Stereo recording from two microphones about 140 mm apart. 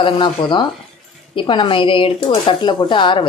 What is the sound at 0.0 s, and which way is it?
Speech, 35° left (ahead or behind).